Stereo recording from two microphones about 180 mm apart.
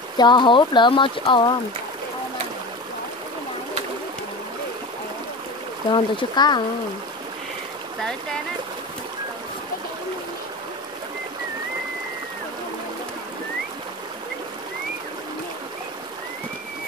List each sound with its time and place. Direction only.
0.2 s speech: 25° left (ahead or behind)
5.9 s speech: 25° left (ahead or behind)